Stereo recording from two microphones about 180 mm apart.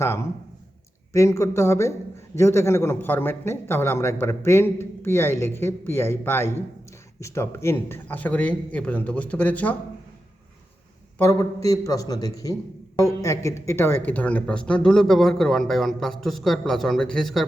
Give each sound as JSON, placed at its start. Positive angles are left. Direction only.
{"t": 0.0, "sound": "a man's voice", "side_deg": 15}
{"t": 11.2, "sound": "a man's voice", "side_deg": 20}